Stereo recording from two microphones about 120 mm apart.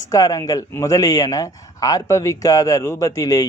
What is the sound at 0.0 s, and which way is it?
A man's voice, 30° left (ahead or behind).